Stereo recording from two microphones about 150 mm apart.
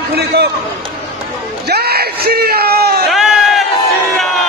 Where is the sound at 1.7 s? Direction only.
90° right.